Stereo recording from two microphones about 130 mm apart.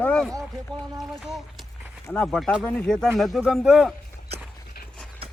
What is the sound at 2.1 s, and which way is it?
Speech, 5° left (ahead or behind).